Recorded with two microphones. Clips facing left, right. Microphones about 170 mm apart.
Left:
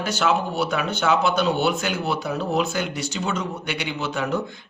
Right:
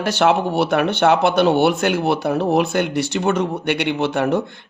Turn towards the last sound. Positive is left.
turn(degrees=-60)  # may be behind; listen again after turning